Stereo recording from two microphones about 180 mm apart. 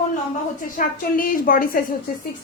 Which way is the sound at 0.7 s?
50° left (ahead or behind).